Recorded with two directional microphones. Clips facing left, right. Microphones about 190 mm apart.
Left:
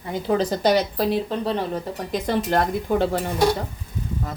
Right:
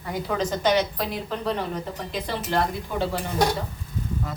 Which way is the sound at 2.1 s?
45° left (ahead or behind).